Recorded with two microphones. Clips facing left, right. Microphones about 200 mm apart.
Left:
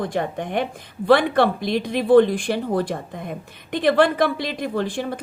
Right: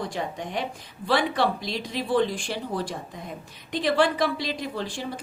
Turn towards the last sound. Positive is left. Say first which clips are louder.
# left 7 dB
turn(degrees=55)  # may be behind; listen again after turning